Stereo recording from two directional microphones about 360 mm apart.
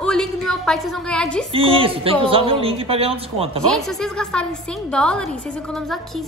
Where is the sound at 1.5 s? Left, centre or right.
Centre.